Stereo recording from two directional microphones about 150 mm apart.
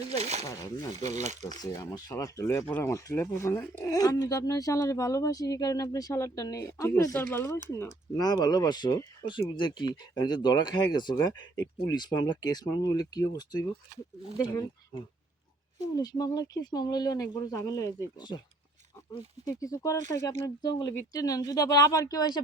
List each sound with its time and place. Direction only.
0.1 s a sound: 45° right (ahead or behind)
0.4 s speech: 20° left (ahead or behind)
1.1 s speech: 50° right (ahead or behind)
1.9 s speech: 20° left (ahead or behind)
8.1 s speech: 25° left (ahead or behind)
16.0 s speech: 25° left (ahead or behind)
19.5 s speech: 20° left (ahead or behind)